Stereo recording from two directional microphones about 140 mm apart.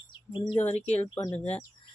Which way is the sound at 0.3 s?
35° left (ahead or behind).